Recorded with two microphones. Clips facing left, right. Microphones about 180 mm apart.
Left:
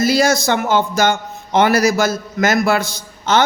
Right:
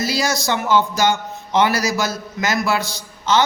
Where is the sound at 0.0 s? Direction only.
50° left (ahead or behind).